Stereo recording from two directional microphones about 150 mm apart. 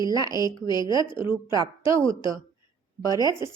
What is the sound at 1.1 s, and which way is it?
Speech, 15° right (ahead or behind).